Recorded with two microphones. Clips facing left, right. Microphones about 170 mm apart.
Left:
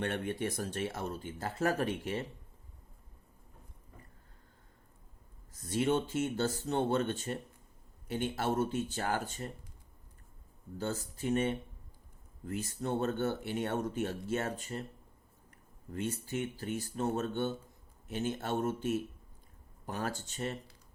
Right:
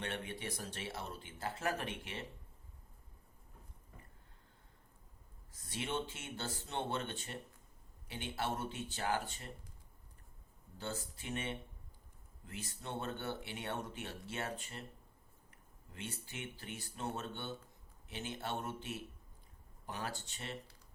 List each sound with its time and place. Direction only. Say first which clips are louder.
0.0 s speech: left 8 dB; 50° left (ahead or behind)
5.6 s speech: left 10 dB; 45° left (ahead or behind)
10.8 s speech: left 7 dB; 45° left (ahead or behind)
15.9 s speech: left 12 dB; 45° left (ahead or behind)